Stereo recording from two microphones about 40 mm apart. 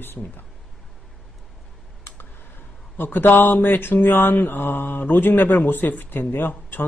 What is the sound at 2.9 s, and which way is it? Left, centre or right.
Speech, left.